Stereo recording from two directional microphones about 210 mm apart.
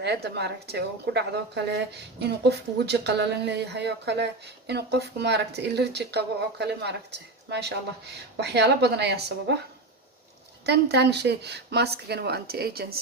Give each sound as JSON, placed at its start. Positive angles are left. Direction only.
{"t": 0.0, "sound": "speech", "side_deg": -50}
{"t": 10.7, "sound": "speech", "side_deg": -55}